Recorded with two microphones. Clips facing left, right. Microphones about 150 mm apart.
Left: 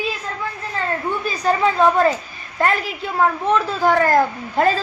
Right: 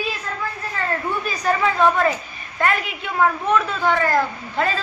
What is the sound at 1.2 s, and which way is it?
A child's voice, 30° left (ahead or behind).